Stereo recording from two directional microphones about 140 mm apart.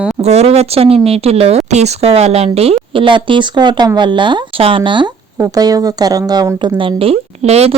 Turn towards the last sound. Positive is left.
turn(degrees=-45)  # may be behind; listen again after turning